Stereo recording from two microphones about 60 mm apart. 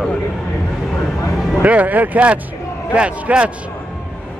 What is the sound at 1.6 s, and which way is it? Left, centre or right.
Speech, right.